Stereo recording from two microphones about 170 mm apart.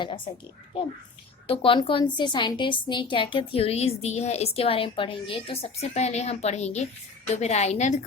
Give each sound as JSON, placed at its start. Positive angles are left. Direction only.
{"t": 1.5, "sound": "a woman's voice", "side_deg": 30}